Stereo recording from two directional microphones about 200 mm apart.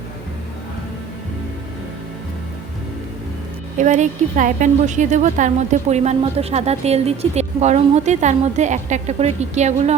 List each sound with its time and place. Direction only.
3.8 s speech: 35° right (ahead or behind)